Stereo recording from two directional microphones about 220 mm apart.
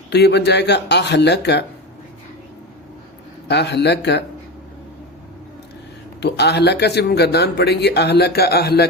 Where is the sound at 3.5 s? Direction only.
50° left (ahead or behind).